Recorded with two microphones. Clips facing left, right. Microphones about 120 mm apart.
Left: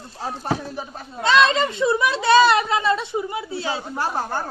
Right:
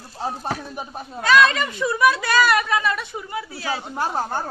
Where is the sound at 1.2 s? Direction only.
25° left (ahead or behind).